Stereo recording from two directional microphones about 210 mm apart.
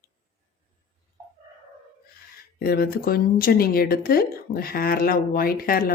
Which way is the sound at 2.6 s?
45° left (ahead or behind).